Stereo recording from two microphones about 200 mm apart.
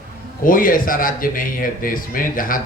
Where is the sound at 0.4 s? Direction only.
45° left (ahead or behind).